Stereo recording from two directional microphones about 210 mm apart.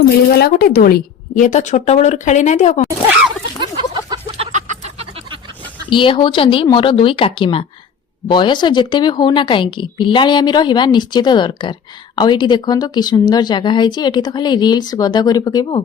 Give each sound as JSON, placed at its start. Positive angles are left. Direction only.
{"t": 0.3, "sound": "a woman's voice", "side_deg": 45}
{"t": 3.6, "sound": "a sound", "side_deg": -25}
{"t": 5.9, "sound": "a woman's voice", "side_deg": 25}